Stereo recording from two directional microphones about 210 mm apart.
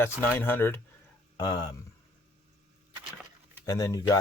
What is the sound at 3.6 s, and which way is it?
Speech, 15° left (ahead or behind).